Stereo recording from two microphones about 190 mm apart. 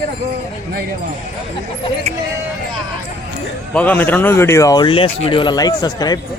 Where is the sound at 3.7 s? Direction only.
10° left (ahead or behind).